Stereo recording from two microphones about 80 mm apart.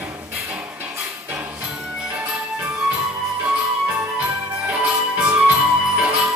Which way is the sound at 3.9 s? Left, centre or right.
Centre.